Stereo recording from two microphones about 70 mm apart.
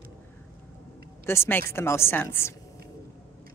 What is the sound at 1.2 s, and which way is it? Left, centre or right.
A woman's voice, left.